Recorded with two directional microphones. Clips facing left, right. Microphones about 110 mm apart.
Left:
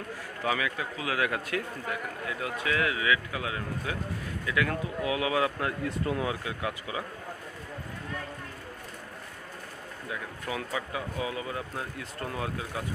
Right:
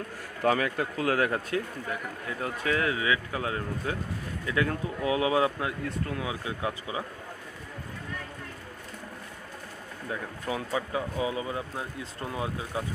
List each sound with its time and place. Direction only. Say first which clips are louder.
0.4 s a man's voice: right 5 dB; 45° right (ahead or behind); by 5.5 s 30° right (ahead or behind)
5.9 s speech: left 3 dB; centre (ahead or behind)
6.4 s speech: right 1 dB; 25° right (ahead or behind)
10.0 s speech: right 3 dB; 30° right (ahead or behind)